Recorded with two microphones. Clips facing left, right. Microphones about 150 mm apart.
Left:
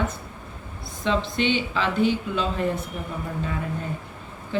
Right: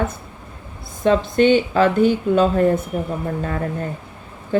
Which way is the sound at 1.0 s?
50° right (ahead or behind).